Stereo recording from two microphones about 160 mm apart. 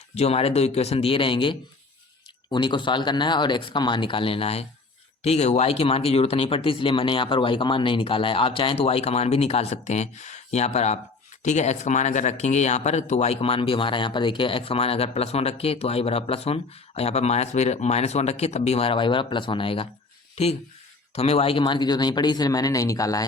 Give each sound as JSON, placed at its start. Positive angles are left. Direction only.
{"t": 0.1, "sound": "speech", "side_deg": 40}